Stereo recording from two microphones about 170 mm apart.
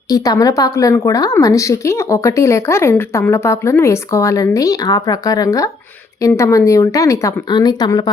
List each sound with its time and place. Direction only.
0.1 s a woman's voice: 20° left (ahead or behind)